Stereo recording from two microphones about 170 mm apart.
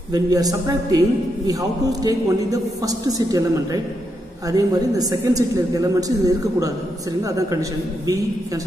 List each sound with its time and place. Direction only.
0.1 s a man's voice: 20° right (ahead or behind)